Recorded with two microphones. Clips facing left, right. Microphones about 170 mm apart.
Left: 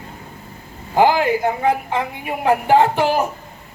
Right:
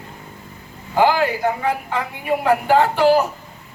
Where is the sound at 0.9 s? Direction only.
20° left (ahead or behind).